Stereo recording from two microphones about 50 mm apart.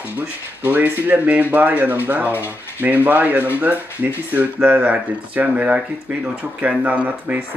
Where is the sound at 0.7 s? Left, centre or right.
Right.